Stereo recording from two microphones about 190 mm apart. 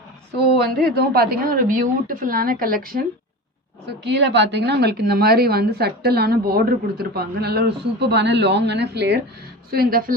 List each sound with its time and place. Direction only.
0.6 s a woman's voice: 55° right (ahead or behind)
4.0 s a woman's voice: 65° right (ahead or behind)
9.7 s a woman's voice: 50° right (ahead or behind)